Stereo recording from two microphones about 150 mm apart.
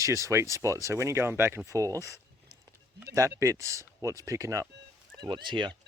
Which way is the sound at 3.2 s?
20° right (ahead or behind).